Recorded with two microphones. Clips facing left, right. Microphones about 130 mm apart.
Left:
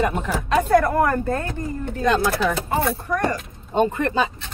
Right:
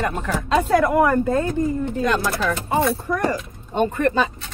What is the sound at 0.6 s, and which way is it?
Speech, 10° right (ahead or behind).